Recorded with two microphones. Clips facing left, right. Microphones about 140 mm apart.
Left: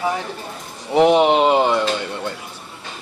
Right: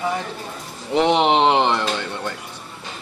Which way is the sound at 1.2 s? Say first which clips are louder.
Left 1 dB; 5° left (ahead or behind).